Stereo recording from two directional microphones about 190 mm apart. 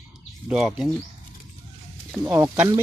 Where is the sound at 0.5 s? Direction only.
Centre (ahead or behind).